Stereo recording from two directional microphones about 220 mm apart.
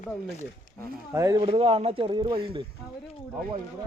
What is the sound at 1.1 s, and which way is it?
Speech, 15° right (ahead or behind).